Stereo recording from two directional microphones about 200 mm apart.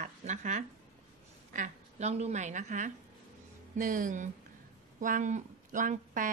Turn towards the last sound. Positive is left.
turn(degrees=-40)  # may be behind; listen again after turning